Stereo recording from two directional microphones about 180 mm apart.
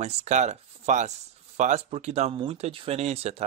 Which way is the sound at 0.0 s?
35° right (ahead or behind).